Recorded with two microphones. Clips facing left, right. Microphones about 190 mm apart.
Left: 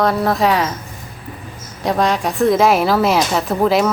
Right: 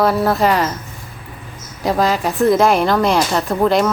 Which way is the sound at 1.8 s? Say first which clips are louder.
Even; centre (ahead or behind).